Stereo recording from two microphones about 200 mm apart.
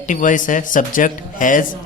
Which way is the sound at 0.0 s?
40° left (ahead or behind).